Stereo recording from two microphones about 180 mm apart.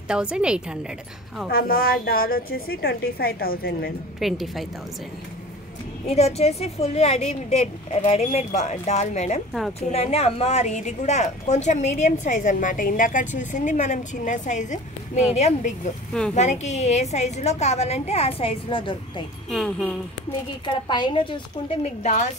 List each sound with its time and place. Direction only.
0.1 s a woman's voice: 5° right (ahead or behind)
1.5 s a woman's voice: 55° left (ahead or behind)
4.2 s a woman's voice: centre (ahead or behind)
6.0 s a woman's voice: 35° left (ahead or behind)
16.1 s speech: 5° left (ahead or behind)
16.3 s a woman's voice: 40° left (ahead or behind)
19.5 s a woman's voice: 5° left (ahead or behind)
20.6 s a woman's voice: 25° left (ahead or behind)
21.8 s a woman's voice: 40° left (ahead or behind)